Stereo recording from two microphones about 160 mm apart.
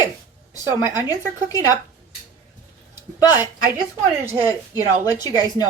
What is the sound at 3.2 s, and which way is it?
Speech, 25° left (ahead or behind).